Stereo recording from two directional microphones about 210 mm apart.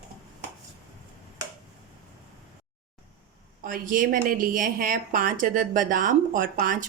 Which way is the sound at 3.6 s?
40° right (ahead or behind).